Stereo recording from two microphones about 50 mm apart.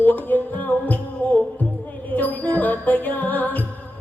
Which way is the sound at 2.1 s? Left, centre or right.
Left.